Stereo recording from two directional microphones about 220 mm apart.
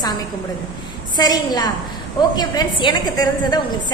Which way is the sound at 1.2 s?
15° left (ahead or behind).